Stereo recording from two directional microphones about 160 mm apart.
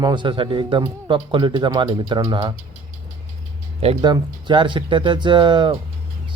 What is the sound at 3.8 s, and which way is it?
Speech, 30° right (ahead or behind).